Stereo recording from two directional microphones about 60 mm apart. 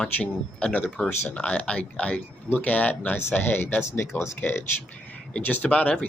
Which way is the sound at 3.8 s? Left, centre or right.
Left.